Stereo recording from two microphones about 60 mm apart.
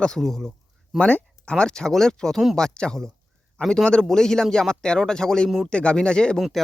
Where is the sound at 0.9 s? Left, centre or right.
Centre.